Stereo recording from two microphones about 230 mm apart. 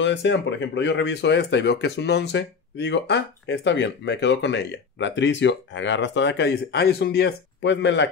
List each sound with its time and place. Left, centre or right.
0.0 s speech: left